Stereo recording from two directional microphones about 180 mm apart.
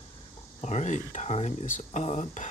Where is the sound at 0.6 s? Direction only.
40° left (ahead or behind).